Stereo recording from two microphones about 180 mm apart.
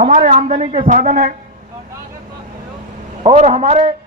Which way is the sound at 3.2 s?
35° right (ahead or behind).